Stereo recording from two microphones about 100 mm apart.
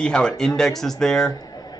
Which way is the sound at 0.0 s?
10° left (ahead or behind).